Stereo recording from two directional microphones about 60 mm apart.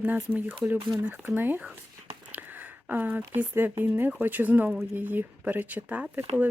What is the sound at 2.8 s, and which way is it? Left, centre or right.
Speech, right.